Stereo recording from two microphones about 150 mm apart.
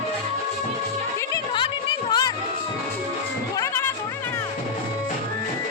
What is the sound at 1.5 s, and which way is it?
Music, 30° left (ahead or behind).